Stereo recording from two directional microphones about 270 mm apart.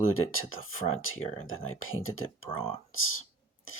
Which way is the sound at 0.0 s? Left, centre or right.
Left.